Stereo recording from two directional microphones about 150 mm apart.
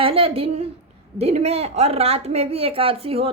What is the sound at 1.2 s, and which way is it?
A woman's voice, 45° right (ahead or behind).